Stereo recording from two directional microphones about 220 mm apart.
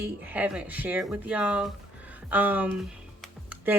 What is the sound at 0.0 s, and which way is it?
Speech, 5° right (ahead or behind).